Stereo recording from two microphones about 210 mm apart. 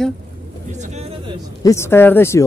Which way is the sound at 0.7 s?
35° right (ahead or behind).